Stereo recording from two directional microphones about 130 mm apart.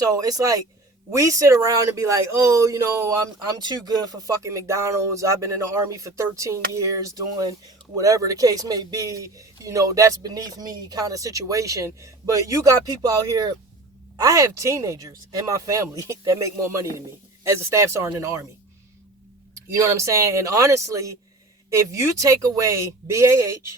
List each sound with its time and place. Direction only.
0.0 s speech: 30° right (ahead or behind)
19.5 s speech: 25° right (ahead or behind)